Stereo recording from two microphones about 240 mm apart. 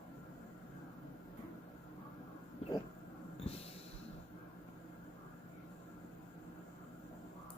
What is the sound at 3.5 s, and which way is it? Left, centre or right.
Snort, left.